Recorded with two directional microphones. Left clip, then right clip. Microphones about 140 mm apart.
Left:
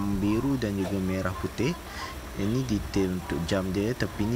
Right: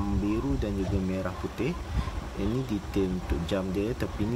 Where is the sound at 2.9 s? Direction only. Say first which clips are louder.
Even; 20° left (ahead or behind).